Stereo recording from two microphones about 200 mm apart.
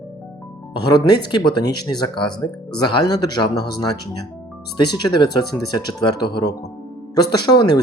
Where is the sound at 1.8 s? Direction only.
20° left (ahead or behind).